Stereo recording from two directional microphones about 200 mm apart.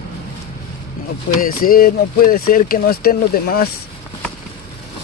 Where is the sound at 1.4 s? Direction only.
45° left (ahead or behind).